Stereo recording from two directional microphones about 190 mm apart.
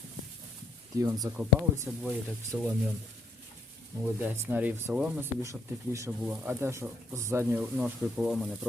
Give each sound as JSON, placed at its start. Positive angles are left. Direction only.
{"t": 0.9, "sound": "speech", "side_deg": -20}
{"t": 1.3, "sound": "speech", "side_deg": -5}
{"t": 4.0, "sound": "speech", "side_deg": -10}